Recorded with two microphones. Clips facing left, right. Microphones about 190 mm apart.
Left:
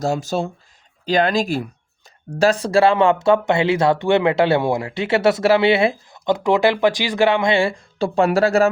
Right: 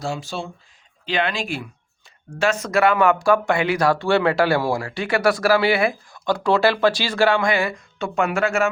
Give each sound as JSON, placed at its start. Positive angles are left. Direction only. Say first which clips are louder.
{"t": 0.0, "sound": "speech", "louder": "left 7 dB", "side_deg": 40}